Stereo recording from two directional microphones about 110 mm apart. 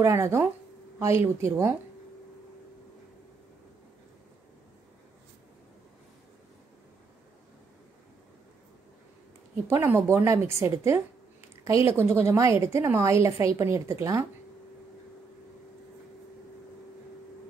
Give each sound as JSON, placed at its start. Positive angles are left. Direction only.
{"t": 0.0, "sound": "a woman's voice", "side_deg": -25}
{"t": 9.7, "sound": "a woman's voice", "side_deg": -25}